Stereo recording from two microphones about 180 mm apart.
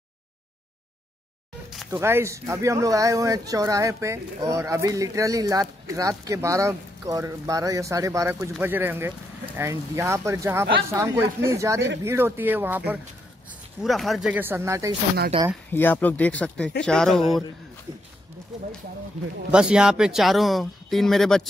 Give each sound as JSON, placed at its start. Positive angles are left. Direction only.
{"t": 1.9, "sound": "speech", "side_deg": -15}
{"t": 15.7, "sound": "speech", "side_deg": 10}
{"t": 19.5, "sound": "speech", "side_deg": -5}